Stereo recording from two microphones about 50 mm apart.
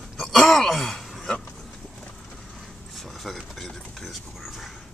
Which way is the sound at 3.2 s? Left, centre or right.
Centre.